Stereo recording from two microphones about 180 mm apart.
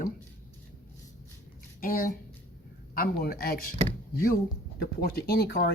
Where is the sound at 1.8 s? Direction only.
50° left (ahead or behind).